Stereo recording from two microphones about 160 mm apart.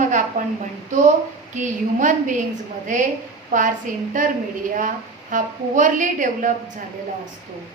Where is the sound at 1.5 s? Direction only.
50° right (ahead or behind).